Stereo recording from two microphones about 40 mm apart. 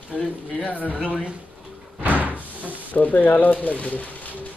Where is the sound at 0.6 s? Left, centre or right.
Left.